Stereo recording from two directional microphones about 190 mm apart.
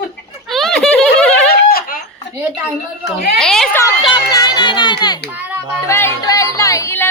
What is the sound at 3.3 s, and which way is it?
Speech, 5° left (ahead or behind).